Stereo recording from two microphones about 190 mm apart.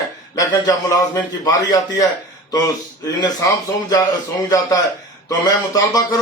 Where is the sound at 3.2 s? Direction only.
20° left (ahead or behind).